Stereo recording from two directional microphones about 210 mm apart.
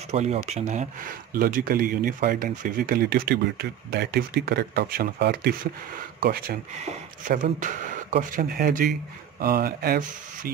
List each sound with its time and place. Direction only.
0.1 s speech: 30° right (ahead or behind)
6.7 s speech: 35° right (ahead or behind)